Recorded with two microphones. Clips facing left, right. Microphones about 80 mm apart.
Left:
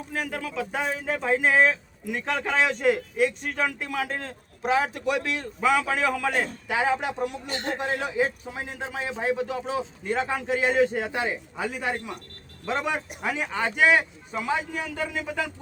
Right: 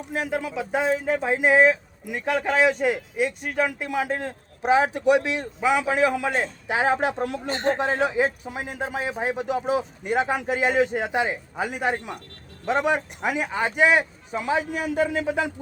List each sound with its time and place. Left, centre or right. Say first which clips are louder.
0.1 s speech: right 5 dB; right
8.5 s a man's voice: right 4 dB; centre; by 11.9 s right
12.6 s a man's voice: right 5 dB; centre